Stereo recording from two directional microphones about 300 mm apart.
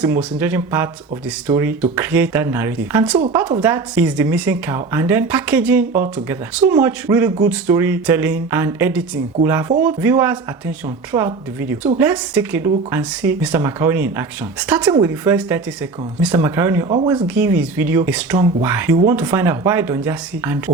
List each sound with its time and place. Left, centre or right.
0.0 s speech: centre
17.2 s speech: centre